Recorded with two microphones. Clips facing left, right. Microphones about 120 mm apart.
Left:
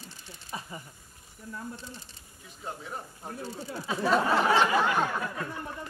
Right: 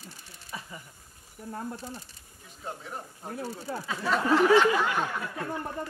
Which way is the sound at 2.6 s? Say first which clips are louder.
Even; centre (ahead or behind).